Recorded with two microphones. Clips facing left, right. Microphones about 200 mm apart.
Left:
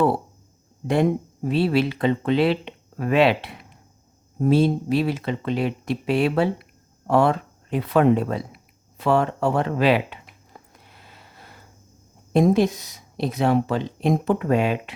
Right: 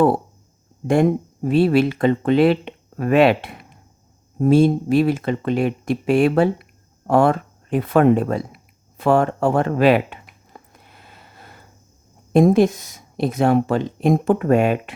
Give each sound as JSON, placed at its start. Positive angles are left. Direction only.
{"t": 1.5, "sound": "speech", "side_deg": -50}
{"t": 9.0, "sound": "a sound", "side_deg": -50}
{"t": 12.3, "sound": "speech", "side_deg": -50}